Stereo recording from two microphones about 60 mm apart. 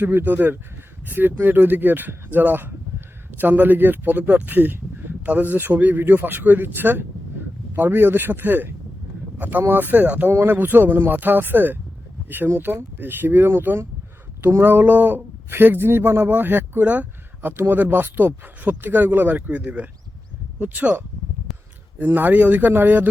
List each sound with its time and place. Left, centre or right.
0.0 s speech: right
14.6 s speech: right
21.5 s a sound: centre
21.9 s speech: right